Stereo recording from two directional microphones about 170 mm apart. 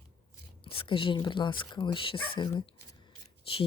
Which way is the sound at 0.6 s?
30° left (ahead or behind).